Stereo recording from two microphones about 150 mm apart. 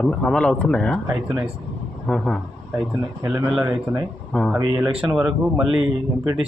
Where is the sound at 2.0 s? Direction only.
5° left (ahead or behind).